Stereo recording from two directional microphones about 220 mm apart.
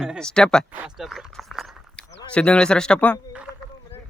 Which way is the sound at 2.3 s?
5° left (ahead or behind).